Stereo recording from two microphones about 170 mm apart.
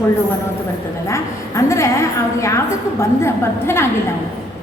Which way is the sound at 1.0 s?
15° left (ahead or behind).